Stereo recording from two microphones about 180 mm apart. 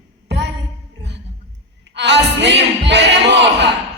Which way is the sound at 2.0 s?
75° right (ahead or behind).